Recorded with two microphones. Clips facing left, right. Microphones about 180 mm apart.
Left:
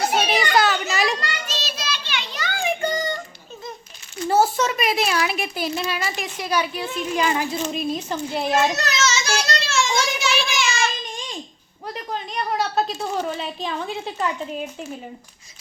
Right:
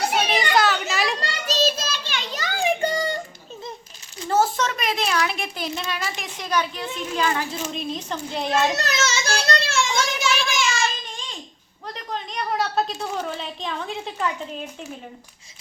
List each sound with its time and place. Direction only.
0.3 s children playing: 5° left (ahead or behind)
1.2 s child singing: 40° right (ahead or behind)
4.3 s a child's voice: 10° left (ahead or behind)
9.0 s child singing: 55° right (ahead or behind)
11.9 s a woman's voice: 5° left (ahead or behind)